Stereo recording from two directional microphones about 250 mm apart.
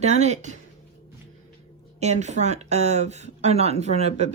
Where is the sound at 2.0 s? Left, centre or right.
Right.